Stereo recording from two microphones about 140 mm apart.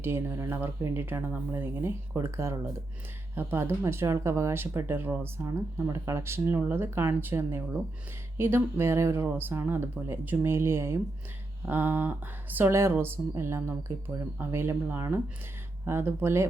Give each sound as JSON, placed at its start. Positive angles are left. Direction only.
{"t": 0.0, "sound": "speech", "side_deg": -15}